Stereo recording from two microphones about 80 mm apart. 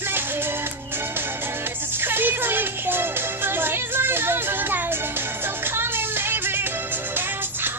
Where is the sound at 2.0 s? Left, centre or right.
Right.